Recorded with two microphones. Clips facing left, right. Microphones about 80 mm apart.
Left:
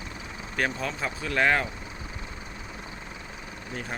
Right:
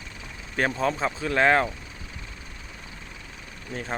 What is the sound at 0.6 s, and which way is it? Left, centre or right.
Speech, right.